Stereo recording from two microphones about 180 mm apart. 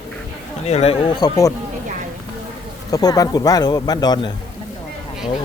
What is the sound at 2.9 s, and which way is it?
Speech, 20° left (ahead or behind).